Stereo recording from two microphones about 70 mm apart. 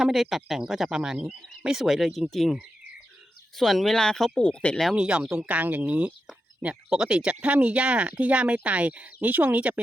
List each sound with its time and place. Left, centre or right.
0.0 s speech: centre
4.9 s speech: centre